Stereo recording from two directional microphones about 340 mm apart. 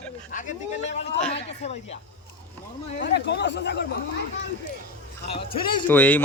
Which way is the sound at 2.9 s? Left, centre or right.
Left.